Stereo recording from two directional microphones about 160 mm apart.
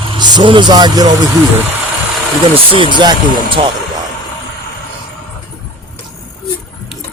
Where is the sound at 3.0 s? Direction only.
30° right (ahead or behind).